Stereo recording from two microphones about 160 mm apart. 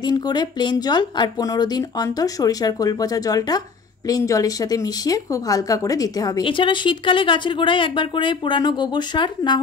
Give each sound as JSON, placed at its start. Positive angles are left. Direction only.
{"t": 0.0, "sound": "speech", "side_deg": 25}